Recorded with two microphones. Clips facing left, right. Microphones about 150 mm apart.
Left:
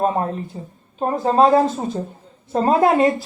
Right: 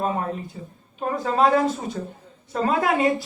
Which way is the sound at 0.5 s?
30° left (ahead or behind).